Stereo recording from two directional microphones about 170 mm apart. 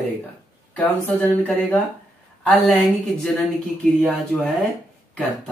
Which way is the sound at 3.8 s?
10° left (ahead or behind).